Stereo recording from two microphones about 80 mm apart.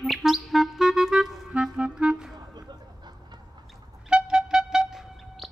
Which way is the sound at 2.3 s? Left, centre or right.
Right.